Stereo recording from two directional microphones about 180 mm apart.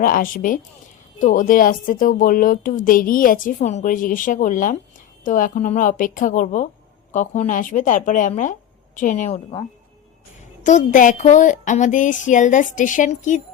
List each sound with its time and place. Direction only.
0.0 s speech: 50° left (ahead or behind)
10.6 s speech: 45° left (ahead or behind)